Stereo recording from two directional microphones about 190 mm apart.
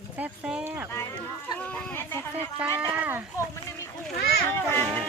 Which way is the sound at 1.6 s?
5° left (ahead or behind).